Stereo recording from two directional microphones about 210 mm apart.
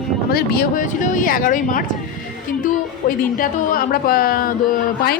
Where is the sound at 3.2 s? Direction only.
40° left (ahead or behind).